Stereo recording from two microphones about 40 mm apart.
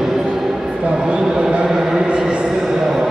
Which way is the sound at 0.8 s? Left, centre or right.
Right.